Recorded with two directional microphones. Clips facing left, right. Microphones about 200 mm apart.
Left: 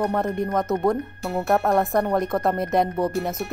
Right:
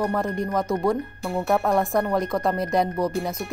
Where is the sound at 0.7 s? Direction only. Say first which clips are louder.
Left 1 dB; 20° left (ahead or behind).